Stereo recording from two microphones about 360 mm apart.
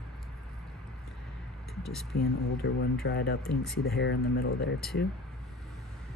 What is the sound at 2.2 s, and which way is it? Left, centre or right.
Speech, left.